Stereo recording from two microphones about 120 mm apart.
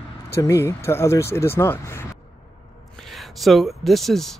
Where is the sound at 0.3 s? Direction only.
25° left (ahead or behind).